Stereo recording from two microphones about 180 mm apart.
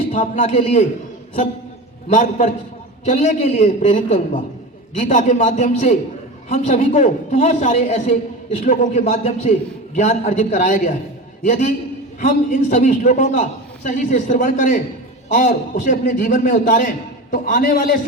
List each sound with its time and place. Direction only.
0.1 s a man's voice: 40° left (ahead or behind)
2.1 s a man's voice: 45° left (ahead or behind)